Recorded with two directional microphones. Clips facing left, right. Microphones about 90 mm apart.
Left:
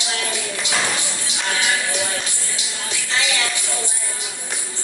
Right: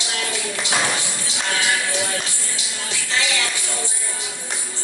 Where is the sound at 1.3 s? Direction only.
20° left (ahead or behind).